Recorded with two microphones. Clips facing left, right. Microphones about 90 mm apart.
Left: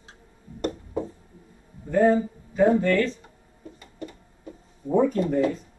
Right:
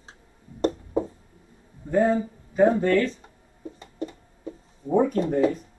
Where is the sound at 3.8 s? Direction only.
25° right (ahead or behind).